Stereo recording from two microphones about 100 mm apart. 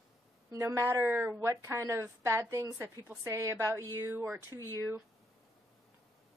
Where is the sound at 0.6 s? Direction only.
30° right (ahead or behind).